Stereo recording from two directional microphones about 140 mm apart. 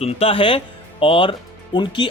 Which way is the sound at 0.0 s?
45° left (ahead or behind).